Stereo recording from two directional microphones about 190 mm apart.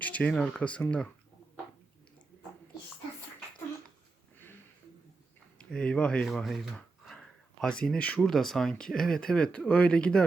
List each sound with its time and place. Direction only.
0.0 s speech: 5° left (ahead or behind)
5.5 s speech: 5° left (ahead or behind)